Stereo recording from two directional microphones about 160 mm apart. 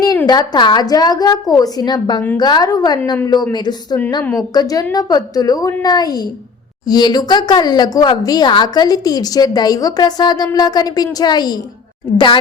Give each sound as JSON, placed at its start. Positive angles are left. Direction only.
{"t": 0.3, "sound": "a woman's voice", "side_deg": 25}
{"t": 4.2, "sound": "a woman's voice", "side_deg": 5}
{"t": 4.5, "sound": "a woman's voice", "side_deg": 25}